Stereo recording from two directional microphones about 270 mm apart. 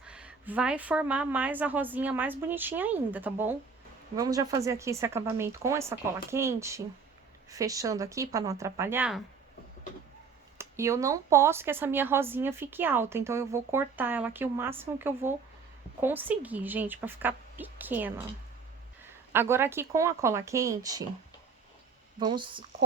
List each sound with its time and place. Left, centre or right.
0.0 s a woman's voice: centre
10.6 s speech: centre
19.3 s speech: centre
22.2 s speech: centre